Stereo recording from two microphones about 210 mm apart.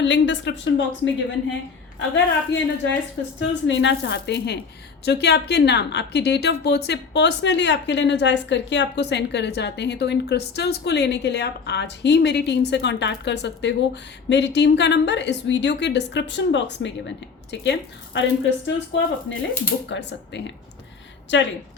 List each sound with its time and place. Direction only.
0.0 s a woman's voice: 60° left (ahead or behind)
3.7 s a woman's voice: 55° left (ahead or behind)